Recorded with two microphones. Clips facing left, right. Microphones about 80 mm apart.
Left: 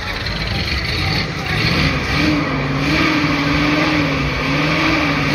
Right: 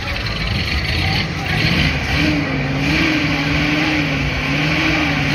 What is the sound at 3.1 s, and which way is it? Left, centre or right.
Vehicle, centre.